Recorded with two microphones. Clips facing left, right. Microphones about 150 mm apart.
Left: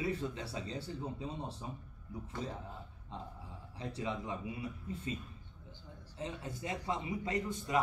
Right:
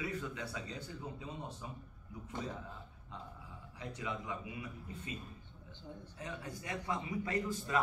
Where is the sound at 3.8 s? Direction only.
30° left (ahead or behind).